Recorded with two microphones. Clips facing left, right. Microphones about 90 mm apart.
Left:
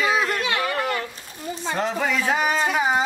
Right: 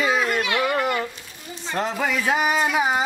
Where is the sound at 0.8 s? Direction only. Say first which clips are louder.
Right 2 dB; 5° right (ahead or behind).